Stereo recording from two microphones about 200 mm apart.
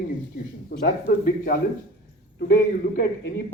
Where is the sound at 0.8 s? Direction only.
50° left (ahead or behind).